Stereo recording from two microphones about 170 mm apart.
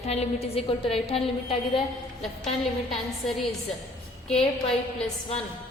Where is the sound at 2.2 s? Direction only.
Centre (ahead or behind).